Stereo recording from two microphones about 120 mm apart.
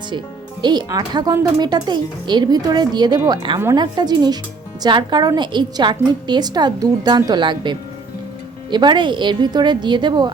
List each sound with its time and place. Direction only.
0.6 s speech: 35° right (ahead or behind)